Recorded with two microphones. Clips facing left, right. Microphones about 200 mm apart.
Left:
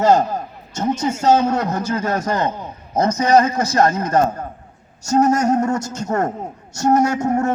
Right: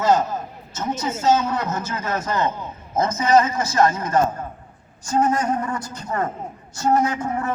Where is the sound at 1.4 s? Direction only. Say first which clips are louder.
Left 6 dB; 45° left (ahead or behind).